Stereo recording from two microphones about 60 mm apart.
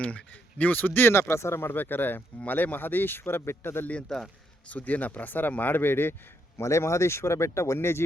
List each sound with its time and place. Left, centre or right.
0.0 s speech: left
1.1 s speech: left
4.1 s a man's voice: centre
4.7 s speech: left
6.6 s speech: left